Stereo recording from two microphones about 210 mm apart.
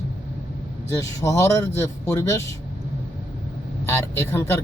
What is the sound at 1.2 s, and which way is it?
Speech, 15° left (ahead or behind).